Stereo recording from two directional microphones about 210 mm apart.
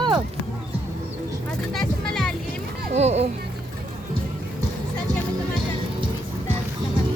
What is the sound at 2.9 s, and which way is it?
Speech, 30° right (ahead or behind).